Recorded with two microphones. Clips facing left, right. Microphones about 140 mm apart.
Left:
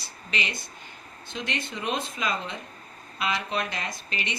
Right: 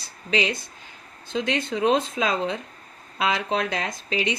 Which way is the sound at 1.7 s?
90° right.